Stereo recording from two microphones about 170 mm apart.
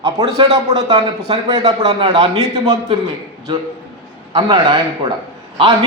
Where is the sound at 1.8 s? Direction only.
35° right (ahead or behind).